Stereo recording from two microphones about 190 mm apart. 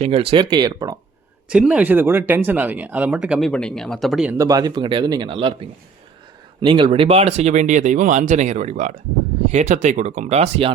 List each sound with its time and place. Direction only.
0.0 s speech: 30° right (ahead or behind)
1.5 s speech: 5° right (ahead or behind)
4.4 s speech: 20° right (ahead or behind); by 10.7 s 35° right (ahead or behind)